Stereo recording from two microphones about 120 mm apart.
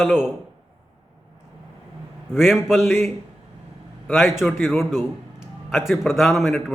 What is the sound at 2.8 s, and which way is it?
Speech, 20° left (ahead or behind).